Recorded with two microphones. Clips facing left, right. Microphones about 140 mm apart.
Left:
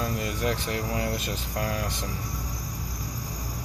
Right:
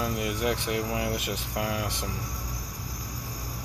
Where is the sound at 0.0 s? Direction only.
15° right (ahead or behind).